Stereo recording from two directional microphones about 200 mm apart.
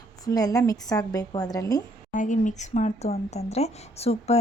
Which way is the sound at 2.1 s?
40° left (ahead or behind).